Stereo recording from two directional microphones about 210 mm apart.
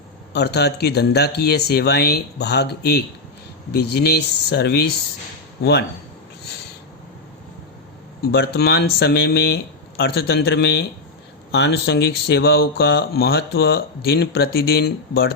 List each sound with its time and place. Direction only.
0.3 s speech: 50° left (ahead or behind)
8.2 s speech: 50° left (ahead or behind)